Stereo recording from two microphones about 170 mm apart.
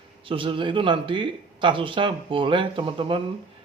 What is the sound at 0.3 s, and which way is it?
A man's voice, 30° right (ahead or behind).